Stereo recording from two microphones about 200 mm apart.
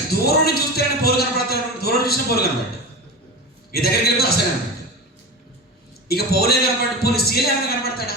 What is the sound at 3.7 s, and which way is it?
Speech, 50° left (ahead or behind).